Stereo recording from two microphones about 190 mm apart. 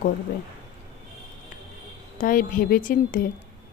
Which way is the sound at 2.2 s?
45° left (ahead or behind).